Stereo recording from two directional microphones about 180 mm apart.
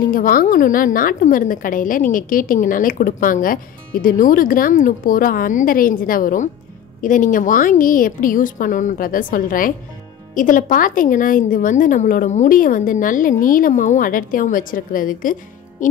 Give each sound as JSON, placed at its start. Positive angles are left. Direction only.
{"t": 0.1, "sound": "a woman's voice", "side_deg": 50}
{"t": 15.8, "sound": "music", "side_deg": 45}